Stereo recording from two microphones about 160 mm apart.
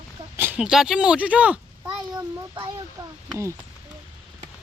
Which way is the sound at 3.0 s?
25° right (ahead or behind).